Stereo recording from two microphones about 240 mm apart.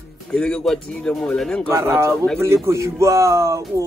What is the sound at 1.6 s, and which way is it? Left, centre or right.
Speech, centre.